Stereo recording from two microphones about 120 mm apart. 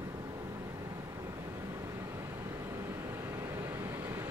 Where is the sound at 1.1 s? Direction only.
25° right (ahead or behind).